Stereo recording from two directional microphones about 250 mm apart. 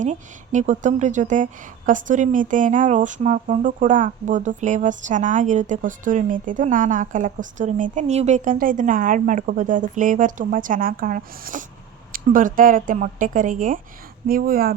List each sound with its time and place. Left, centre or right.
0.0 s a woman's voice: right